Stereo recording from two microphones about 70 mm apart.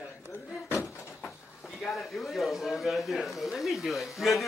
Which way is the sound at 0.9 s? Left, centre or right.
Left.